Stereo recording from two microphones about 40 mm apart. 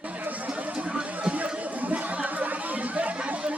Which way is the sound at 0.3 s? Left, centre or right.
Right.